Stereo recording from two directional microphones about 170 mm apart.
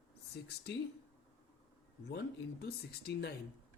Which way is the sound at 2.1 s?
75° left (ahead or behind).